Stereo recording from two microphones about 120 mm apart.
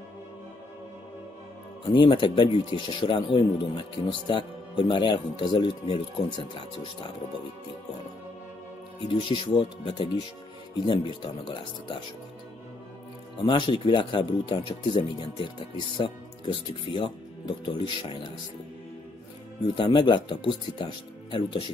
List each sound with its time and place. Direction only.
1.9 s speech: 40° left (ahead or behind)
9.0 s speech: 45° left (ahead or behind)
13.4 s speech: 40° left (ahead or behind)
19.7 s speech: 45° left (ahead or behind)